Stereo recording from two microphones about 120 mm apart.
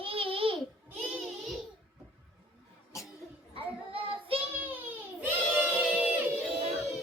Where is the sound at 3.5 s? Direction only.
50° right (ahead or behind).